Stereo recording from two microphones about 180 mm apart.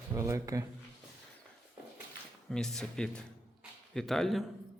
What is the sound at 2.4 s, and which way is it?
Speech, 5° left (ahead or behind).